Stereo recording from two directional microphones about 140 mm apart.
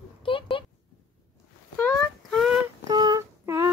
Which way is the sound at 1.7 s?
15° left (ahead or behind).